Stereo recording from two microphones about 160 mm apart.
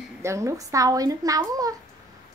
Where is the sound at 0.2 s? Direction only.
20° right (ahead or behind).